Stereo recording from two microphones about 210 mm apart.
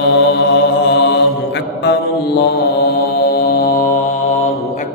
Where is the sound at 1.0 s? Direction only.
55° left (ahead or behind).